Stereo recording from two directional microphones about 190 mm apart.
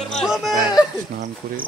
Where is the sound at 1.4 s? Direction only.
50° right (ahead or behind).